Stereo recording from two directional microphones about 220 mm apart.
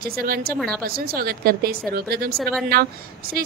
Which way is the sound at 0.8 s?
40° right (ahead or behind).